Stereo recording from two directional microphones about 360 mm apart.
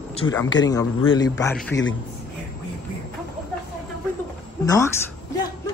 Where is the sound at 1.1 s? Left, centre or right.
Centre.